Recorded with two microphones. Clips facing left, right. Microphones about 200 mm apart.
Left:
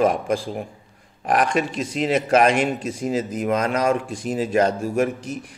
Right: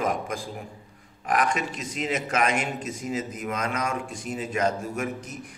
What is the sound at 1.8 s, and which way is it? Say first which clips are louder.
Speech: left 8 dB; 30° left (ahead or behind).